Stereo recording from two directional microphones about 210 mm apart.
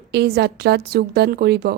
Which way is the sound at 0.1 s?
50° right (ahead or behind).